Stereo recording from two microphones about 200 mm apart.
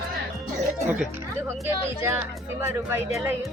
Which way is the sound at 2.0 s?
15° right (ahead or behind).